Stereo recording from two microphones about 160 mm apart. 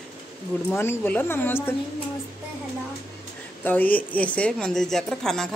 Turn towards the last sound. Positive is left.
turn(degrees=5)  # may be behind; listen again after turning